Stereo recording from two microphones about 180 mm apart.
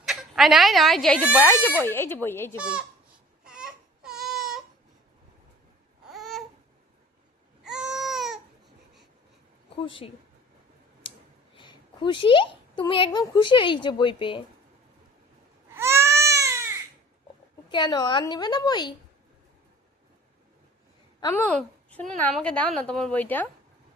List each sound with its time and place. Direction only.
0.0 s a woman's voice: centre (ahead or behind)
1.4 s a woman's voice: 10° left (ahead or behind)
3.4 s baby cry: 5° right (ahead or behind)
6.1 s babbling: centre (ahead or behind)
7.6 s baby cry: 5° right (ahead or behind)
9.7 s a woman's voice: 30° left (ahead or behind)
11.5 s a sound: 25° left (ahead or behind)
13.1 s a woman's voice: 25° left (ahead or behind)
15.7 s baby cry: 15° right (ahead or behind)
17.7 s a woman's voice: 25° left (ahead or behind)
21.2 s a woman's voice: 15° left (ahead or behind)